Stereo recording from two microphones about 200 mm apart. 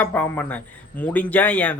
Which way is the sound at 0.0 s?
10° left (ahead or behind).